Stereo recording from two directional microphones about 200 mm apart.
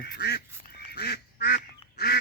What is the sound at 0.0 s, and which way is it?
Goose, 55° left (ahead or behind).